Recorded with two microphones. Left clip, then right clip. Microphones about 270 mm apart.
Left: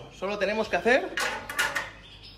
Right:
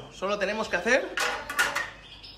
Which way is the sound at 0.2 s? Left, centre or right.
Centre.